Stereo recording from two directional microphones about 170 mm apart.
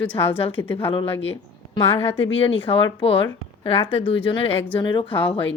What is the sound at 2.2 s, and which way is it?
A woman's voice, 35° left (ahead or behind).